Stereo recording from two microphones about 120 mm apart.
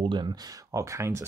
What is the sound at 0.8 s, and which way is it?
Speech, 25° right (ahead or behind).